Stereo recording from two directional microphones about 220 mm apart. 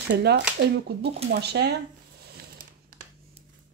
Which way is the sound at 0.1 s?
50° right (ahead or behind).